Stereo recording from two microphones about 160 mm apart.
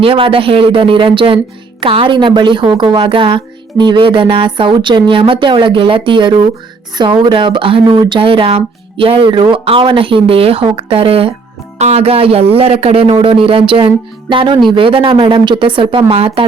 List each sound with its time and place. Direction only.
0.0 s speech: 35° right (ahead or behind)